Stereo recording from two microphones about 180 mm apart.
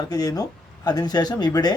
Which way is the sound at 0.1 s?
20° left (ahead or behind).